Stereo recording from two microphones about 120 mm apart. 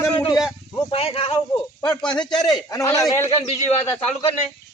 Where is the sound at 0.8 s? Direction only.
50° left (ahead or behind).